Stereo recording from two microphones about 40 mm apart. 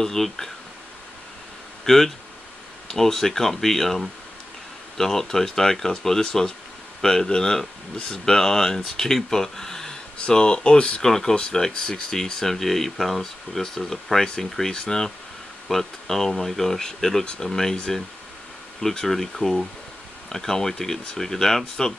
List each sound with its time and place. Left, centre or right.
0.0 s speech: centre
1.9 s speech: centre
10.1 s speech: left
11.0 s speech: centre